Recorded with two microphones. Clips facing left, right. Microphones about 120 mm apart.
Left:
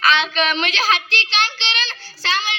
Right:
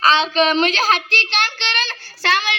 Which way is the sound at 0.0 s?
35° right (ahead or behind).